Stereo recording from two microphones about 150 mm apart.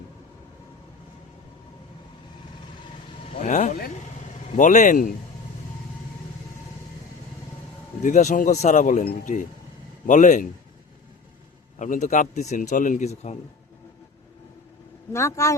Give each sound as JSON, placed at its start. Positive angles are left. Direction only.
{"t": 3.4, "sound": "speech", "side_deg": 55}
{"t": 8.0, "sound": "a man's voice", "side_deg": 55}
{"t": 11.8, "sound": "speech", "side_deg": 55}
{"t": 15.1, "sound": "speech", "side_deg": 20}